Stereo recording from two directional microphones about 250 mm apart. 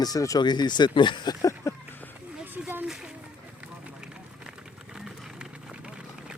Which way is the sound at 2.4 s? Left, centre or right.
Centre.